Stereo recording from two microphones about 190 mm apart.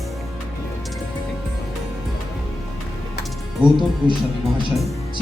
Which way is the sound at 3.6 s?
5° right (ahead or behind).